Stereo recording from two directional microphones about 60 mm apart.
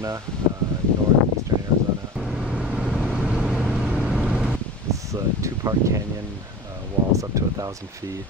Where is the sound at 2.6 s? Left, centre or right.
Centre.